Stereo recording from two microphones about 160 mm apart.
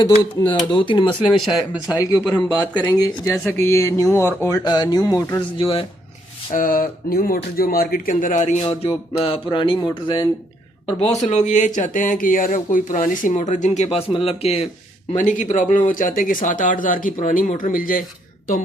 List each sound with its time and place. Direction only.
0.0 s speech: 30° left (ahead or behind)
1.3 s speech: centre (ahead or behind)
1.9 s speech: 25° left (ahead or behind)
5.5 s speech: 35° left (ahead or behind)
6.5 s speech: 60° left (ahead or behind); by 14.7 s 40° left (ahead or behind)
15.1 s speech: 50° left (ahead or behind)